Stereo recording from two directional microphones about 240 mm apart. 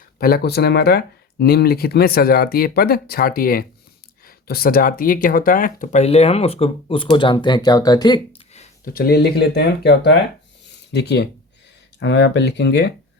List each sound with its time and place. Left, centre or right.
0.2 s speech: left
8.9 s speech: left